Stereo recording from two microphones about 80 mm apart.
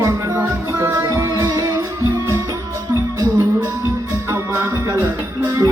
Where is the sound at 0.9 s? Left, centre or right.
Right.